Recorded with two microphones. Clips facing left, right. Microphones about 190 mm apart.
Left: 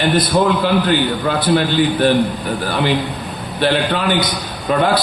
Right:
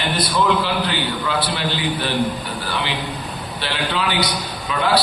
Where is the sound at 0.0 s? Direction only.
50° left (ahead or behind).